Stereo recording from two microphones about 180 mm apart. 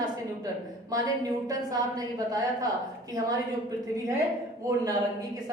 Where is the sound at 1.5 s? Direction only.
20° right (ahead or behind).